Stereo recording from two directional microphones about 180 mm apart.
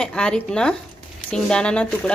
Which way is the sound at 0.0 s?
5° left (ahead or behind).